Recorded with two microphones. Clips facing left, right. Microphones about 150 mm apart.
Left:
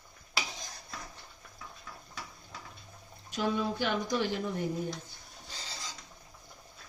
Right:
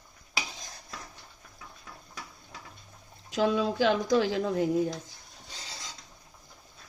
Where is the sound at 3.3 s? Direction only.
90° right.